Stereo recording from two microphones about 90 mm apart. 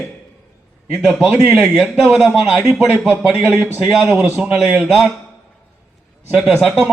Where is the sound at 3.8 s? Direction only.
10° right (ahead or behind).